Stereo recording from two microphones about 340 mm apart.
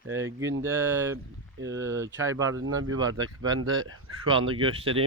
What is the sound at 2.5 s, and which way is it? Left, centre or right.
Speech, right.